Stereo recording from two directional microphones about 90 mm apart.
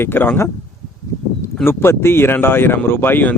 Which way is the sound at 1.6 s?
25° left (ahead or behind).